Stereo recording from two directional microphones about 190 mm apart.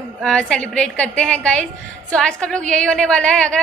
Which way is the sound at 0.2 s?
5° left (ahead or behind).